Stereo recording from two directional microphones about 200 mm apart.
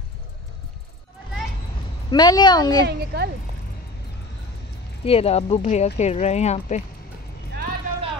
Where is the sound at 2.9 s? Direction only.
55° right (ahead or behind).